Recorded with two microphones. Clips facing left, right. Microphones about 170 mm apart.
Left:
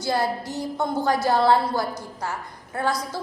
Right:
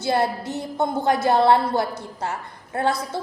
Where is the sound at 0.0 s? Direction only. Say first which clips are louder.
Right 2 dB; 25° right (ahead or behind).